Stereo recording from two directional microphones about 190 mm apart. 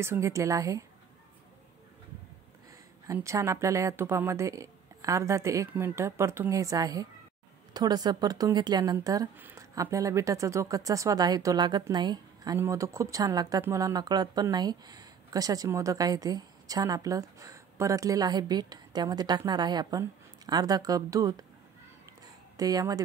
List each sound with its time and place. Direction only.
0.0 s speech: 15° right (ahead or behind)
3.1 s speech: 15° right (ahead or behind)
22.6 s speech: 20° right (ahead or behind)